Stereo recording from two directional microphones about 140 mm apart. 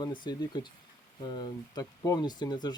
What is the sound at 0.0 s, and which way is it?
Speech, 30° left (ahead or behind).